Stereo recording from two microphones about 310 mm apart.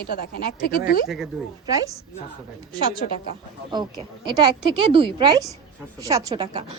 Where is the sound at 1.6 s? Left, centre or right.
Centre.